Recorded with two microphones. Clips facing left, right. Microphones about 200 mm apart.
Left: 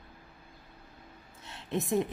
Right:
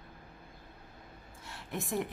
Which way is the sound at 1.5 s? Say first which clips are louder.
Left 6 dB; 20° left (ahead or behind).